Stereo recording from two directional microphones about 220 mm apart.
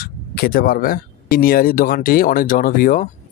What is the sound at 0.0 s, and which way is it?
A man's voice, 45° left (ahead or behind).